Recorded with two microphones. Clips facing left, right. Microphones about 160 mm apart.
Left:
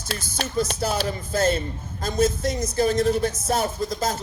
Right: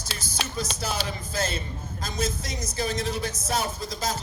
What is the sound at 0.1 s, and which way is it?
A woman's voice, 55° left (ahead or behind).